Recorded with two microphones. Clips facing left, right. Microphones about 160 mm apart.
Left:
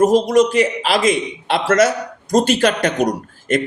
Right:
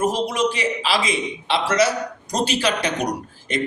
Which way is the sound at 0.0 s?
45° left (ahead or behind).